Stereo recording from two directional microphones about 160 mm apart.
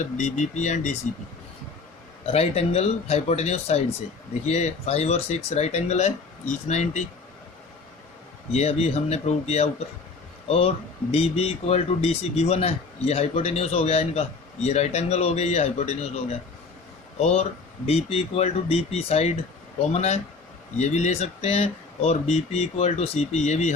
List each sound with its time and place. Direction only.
0.0 s speech: 50° left (ahead or behind)
2.2 s speech: 40° left (ahead or behind)
8.5 s speech: 40° left (ahead or behind)